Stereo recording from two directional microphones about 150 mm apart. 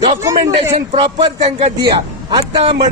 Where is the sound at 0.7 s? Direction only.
40° right (ahead or behind).